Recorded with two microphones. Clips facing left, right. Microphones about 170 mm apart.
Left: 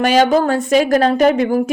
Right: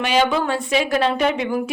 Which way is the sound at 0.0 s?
45° left (ahead or behind).